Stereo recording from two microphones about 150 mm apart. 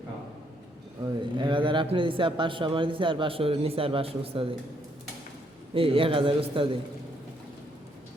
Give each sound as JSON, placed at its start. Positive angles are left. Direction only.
{"t": 1.0, "sound": "a man's voice", "side_deg": -30}
{"t": 5.7, "sound": "a man's voice", "side_deg": -40}